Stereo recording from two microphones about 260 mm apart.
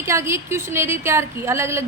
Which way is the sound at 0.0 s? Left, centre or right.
Centre.